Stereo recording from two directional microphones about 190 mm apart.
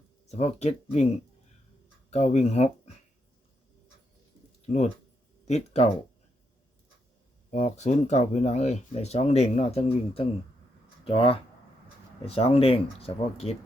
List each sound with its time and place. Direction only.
0.3 s speech: 35° left (ahead or behind)
2.0 s speech: 35° left (ahead or behind)
5.5 s speech: 35° left (ahead or behind)
7.5 s speech: 35° left (ahead or behind)